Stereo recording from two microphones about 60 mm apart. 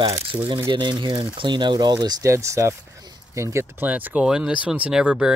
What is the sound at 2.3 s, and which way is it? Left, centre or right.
Speech, right.